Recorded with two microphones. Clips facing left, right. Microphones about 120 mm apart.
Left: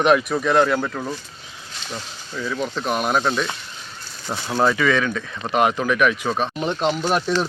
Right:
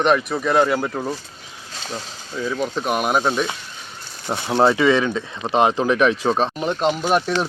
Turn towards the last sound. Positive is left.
turn(degrees=-5)  # may be behind; listen again after turning